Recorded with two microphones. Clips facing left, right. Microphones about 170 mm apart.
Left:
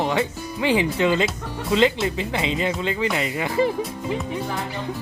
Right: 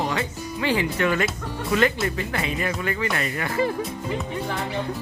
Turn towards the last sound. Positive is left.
turn(degrees=20)  # may be behind; listen again after turning